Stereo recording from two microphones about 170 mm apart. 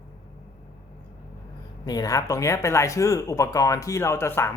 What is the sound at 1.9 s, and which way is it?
Speech, 20° left (ahead or behind).